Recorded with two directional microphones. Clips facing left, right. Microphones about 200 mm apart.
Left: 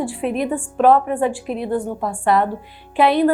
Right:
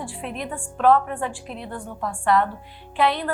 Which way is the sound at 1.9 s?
25° left (ahead or behind).